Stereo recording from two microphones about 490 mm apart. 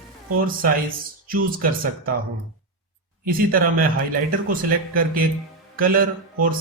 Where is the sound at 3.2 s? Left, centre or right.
Centre.